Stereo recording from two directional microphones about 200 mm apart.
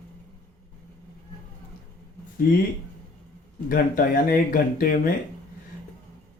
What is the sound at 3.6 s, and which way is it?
Speech, 45° left (ahead or behind).